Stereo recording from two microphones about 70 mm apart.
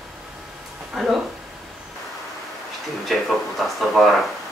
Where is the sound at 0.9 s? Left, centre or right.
Centre.